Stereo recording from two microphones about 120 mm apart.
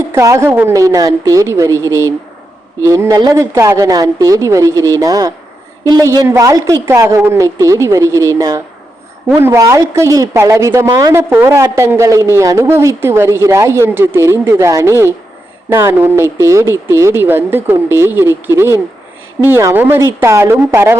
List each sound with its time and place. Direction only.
0.1 s a woman's voice: 25° right (ahead or behind)
0.8 s a woman's voice: 30° right (ahead or behind)